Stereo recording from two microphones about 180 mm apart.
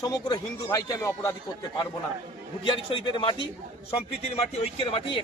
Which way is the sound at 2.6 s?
25° left (ahead or behind).